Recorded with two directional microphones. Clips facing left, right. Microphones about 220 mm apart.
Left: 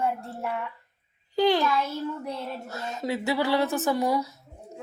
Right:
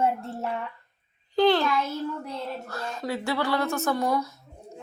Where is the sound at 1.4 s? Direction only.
10° left (ahead or behind).